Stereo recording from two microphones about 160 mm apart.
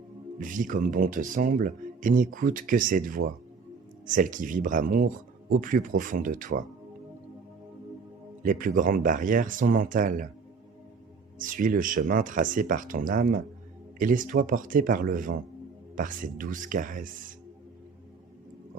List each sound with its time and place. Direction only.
0.3 s speech: 55° right (ahead or behind)
8.4 s speech: 60° right (ahead or behind)
11.3 s speech: 60° right (ahead or behind)